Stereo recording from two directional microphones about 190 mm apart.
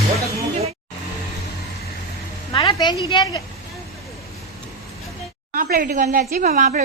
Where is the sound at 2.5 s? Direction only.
20° left (ahead or behind).